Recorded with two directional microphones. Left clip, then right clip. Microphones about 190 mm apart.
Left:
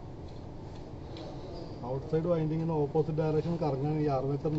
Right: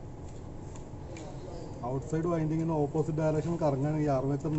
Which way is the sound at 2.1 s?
60° right (ahead or behind).